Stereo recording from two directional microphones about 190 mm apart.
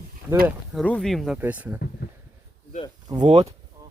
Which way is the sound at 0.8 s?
5° left (ahead or behind).